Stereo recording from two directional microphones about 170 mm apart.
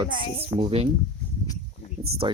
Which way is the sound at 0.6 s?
35° right (ahead or behind).